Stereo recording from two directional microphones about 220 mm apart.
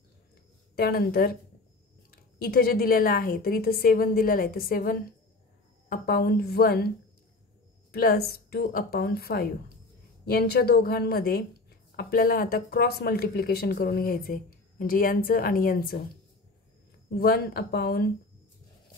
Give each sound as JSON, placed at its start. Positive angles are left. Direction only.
{"t": 0.7, "sound": "a woman's voice", "side_deg": 45}
{"t": 7.9, "sound": "a woman's voice", "side_deg": 45}
{"t": 17.1, "sound": "a woman's voice", "side_deg": 45}